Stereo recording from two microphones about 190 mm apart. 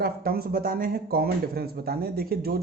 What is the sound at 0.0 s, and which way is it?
Speech, 50° right (ahead or behind).